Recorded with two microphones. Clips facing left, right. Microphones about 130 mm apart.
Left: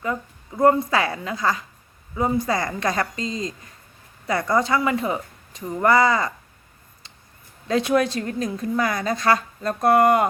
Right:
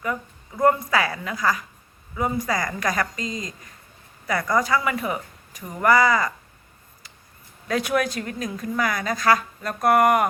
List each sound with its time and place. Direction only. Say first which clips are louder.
0.0 s a woman's voice: left 1 dB; 25° left (ahead or behind)
7.7 s a woman's voice: left 3 dB; 25° left (ahead or behind)